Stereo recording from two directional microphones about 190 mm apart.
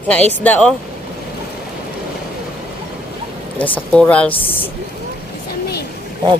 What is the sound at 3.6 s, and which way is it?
Speech, 5° left (ahead or behind).